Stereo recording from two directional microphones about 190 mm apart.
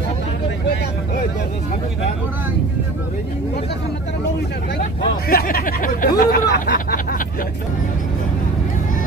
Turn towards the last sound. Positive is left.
turn(degrees=50)  # may be behind; listen again after turning